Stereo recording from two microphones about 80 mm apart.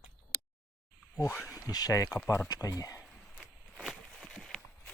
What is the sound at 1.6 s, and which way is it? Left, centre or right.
Speech, left.